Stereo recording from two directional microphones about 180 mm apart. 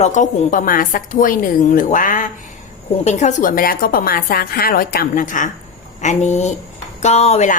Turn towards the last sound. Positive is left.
turn(degrees=40)  # may be behind; listen again after turning